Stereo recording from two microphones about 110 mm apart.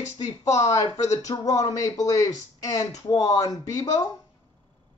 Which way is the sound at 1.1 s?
35° left (ahead or behind).